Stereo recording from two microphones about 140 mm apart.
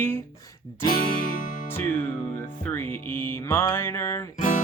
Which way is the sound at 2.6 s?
15° left (ahead or behind).